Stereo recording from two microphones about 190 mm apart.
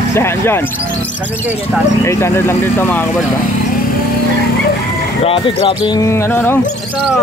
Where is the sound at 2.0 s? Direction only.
15° left (ahead or behind).